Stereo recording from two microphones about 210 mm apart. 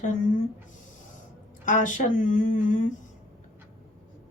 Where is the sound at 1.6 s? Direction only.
35° left (ahead or behind).